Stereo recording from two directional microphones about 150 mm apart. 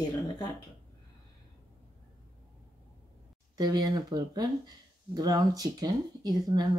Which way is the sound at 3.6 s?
25° right (ahead or behind).